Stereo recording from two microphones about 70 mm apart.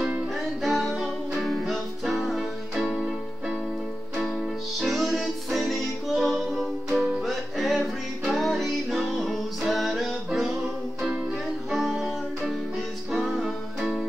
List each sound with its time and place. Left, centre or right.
0.3 s music: centre
4.2 s music: centre
11.7 s music: centre